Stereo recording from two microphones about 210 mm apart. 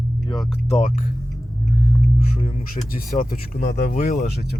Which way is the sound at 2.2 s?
30° left (ahead or behind).